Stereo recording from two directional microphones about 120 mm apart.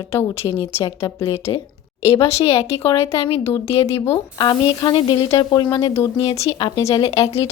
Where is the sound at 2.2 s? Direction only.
55° left (ahead or behind).